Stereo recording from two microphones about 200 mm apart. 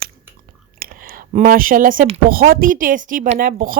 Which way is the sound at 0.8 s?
45° right (ahead or behind).